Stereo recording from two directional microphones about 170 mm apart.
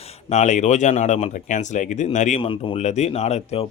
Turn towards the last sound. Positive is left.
turn(degrees=40)  # may be behind; listen again after turning